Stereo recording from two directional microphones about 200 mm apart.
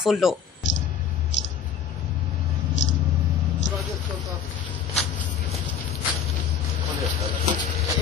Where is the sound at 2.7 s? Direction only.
65° left (ahead or behind).